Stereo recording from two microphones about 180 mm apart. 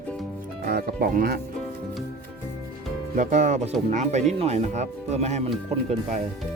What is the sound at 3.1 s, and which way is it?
Speech, 40° right (ahead or behind).